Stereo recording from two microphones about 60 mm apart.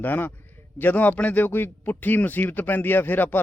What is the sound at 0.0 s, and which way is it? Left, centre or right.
Speech, left.